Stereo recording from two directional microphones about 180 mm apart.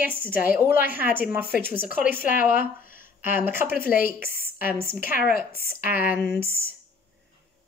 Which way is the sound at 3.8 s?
55° left (ahead or behind).